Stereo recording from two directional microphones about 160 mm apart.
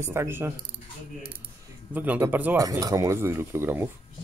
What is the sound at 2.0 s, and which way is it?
Speech, 15° right (ahead or behind).